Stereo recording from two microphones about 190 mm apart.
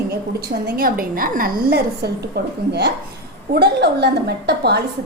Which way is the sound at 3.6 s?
60° right (ahead or behind).